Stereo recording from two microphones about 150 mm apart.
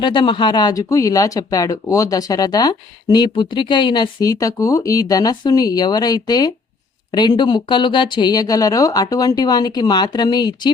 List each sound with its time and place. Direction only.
0.0 s speech: 30° left (ahead or behind)